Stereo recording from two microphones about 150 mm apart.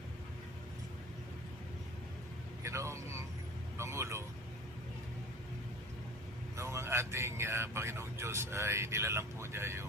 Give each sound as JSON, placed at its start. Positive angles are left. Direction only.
{"t": 2.6, "sound": "a man's voice", "side_deg": -20}
{"t": 6.6, "sound": "a man's voice", "side_deg": -20}